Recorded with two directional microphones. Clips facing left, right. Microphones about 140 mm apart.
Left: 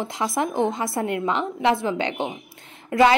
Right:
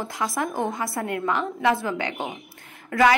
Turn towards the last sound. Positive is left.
turn(degrees=25)  # may be behind; listen again after turning